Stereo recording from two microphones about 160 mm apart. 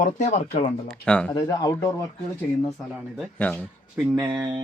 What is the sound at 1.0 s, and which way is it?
Speech, 5° left (ahead or behind).